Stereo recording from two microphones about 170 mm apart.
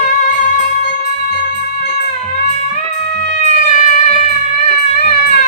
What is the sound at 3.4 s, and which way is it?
Music, 45° left (ahead or behind).